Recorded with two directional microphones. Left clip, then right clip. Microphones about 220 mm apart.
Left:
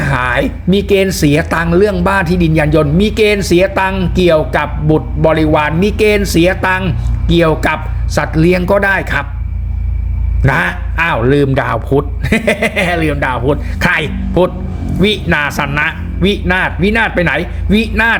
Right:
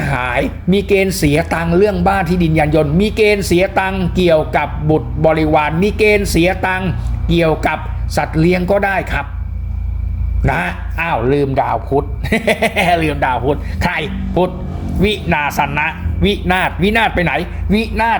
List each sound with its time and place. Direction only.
0.0 s speech: 5° left (ahead or behind)
10.4 s speech: 10° left (ahead or behind)